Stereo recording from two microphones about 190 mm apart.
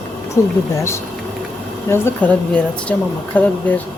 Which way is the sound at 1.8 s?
10° left (ahead or behind).